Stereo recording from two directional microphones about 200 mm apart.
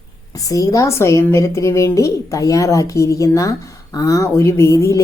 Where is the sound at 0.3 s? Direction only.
15° left (ahead or behind).